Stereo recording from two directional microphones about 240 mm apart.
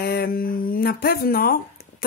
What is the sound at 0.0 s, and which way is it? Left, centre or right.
Speech, left.